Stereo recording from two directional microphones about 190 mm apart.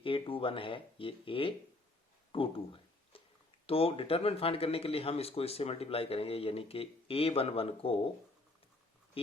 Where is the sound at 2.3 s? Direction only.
30° left (ahead or behind).